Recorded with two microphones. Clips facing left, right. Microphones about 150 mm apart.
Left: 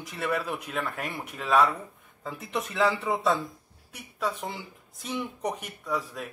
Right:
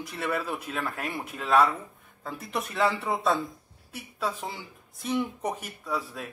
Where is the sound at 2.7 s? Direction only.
Centre (ahead or behind).